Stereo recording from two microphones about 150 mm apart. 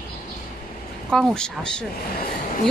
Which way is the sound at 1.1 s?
5° left (ahead or behind).